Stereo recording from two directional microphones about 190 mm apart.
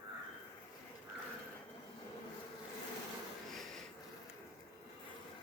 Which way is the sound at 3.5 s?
Centre (ahead or behind).